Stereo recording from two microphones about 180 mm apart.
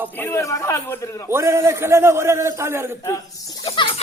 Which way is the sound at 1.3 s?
15° right (ahead or behind).